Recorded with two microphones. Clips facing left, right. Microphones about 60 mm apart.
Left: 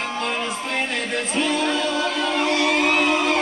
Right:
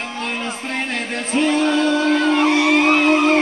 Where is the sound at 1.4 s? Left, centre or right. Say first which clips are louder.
Right 6 dB; right.